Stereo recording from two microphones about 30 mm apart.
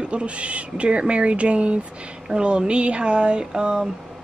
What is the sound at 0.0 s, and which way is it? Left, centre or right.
Speech, right.